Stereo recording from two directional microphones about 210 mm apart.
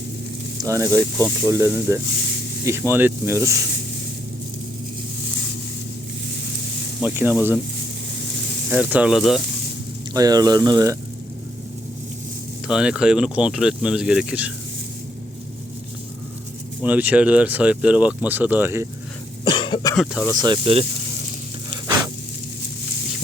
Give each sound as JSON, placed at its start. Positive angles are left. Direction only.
{"t": 0.6, "sound": "speech", "side_deg": -15}
{"t": 7.0, "sound": "speech", "side_deg": -10}
{"t": 8.7, "sound": "speech", "side_deg": -5}
{"t": 10.2, "sound": "speech", "side_deg": -15}
{"t": 12.6, "sound": "speech", "side_deg": -5}
{"t": 16.8, "sound": "speech", "side_deg": -5}
{"t": 19.5, "sound": "cough", "side_deg": 25}
{"t": 20.4, "sound": "speech", "side_deg": -25}
{"t": 21.8, "sound": "a sound", "side_deg": -20}